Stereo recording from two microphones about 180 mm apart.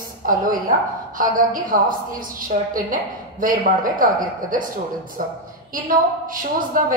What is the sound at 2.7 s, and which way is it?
A woman's voice, 50° right (ahead or behind).